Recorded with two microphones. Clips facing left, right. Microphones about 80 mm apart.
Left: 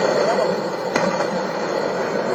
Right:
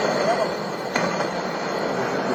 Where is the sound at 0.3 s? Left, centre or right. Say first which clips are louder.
Left 3 dB; left.